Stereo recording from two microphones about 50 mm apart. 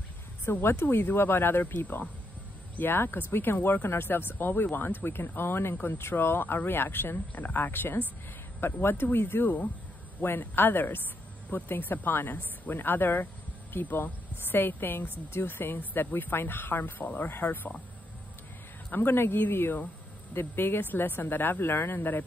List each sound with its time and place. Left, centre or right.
0.5 s speech: left
18.9 s speech: left